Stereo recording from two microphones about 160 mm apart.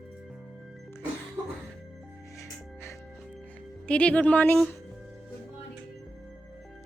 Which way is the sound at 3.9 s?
5° left (ahead or behind).